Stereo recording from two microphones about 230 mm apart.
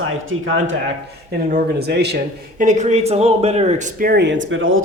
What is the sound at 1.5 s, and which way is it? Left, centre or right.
A man's voice, right.